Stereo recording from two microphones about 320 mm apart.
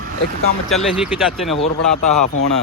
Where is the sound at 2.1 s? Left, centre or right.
Left.